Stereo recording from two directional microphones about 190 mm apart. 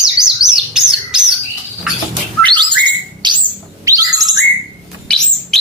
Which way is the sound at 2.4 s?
25° right (ahead or behind).